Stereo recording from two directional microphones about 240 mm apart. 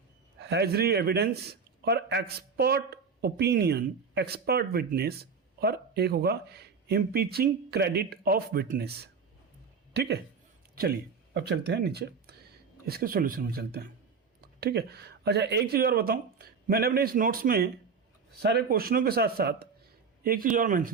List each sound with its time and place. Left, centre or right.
0.3 s speech: right
9.9 s a woman's voice: right
11.3 s speech: right